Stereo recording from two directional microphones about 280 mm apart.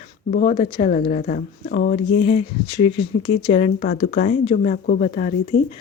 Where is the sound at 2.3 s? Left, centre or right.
Centre.